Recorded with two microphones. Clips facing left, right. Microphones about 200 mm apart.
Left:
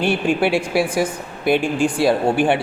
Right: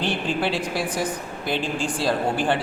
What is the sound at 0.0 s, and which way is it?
A man's voice, 10° left (ahead or behind).